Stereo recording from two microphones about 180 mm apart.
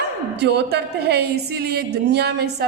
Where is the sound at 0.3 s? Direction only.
65° right (ahead or behind).